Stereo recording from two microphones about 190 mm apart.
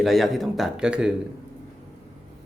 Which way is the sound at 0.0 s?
Centre (ahead or behind).